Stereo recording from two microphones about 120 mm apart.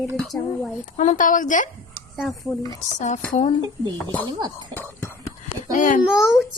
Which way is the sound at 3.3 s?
70° left (ahead or behind).